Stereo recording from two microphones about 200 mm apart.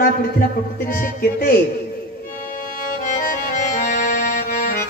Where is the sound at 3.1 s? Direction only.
40° left (ahead or behind).